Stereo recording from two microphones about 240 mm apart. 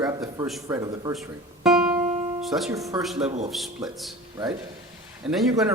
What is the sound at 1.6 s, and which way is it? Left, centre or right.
Music, centre.